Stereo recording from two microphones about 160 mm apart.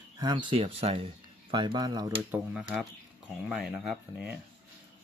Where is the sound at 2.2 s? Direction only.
5° right (ahead or behind).